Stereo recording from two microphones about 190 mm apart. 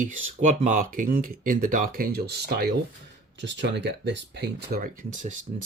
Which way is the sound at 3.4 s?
70° right (ahead or behind).